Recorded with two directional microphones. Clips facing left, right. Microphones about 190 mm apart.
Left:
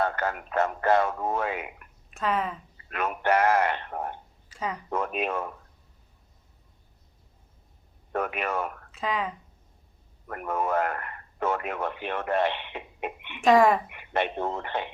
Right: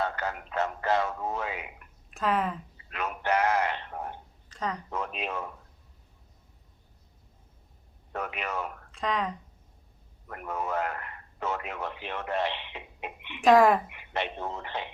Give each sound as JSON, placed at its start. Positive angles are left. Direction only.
{"t": 0.0, "sound": "speech", "side_deg": 55}
{"t": 2.0, "sound": "speech", "side_deg": 0}
{"t": 2.7, "sound": "a sound", "side_deg": 55}
{"t": 4.4, "sound": "a sound", "side_deg": 10}
{"t": 4.9, "sound": "speech", "side_deg": 50}
{"t": 8.1, "sound": "speech", "side_deg": 55}
{"t": 8.9, "sound": "speech", "side_deg": 5}
{"t": 10.2, "sound": "speech", "side_deg": 55}
{"t": 13.4, "sound": "speech", "side_deg": 0}
{"t": 13.9, "sound": "speech", "side_deg": 55}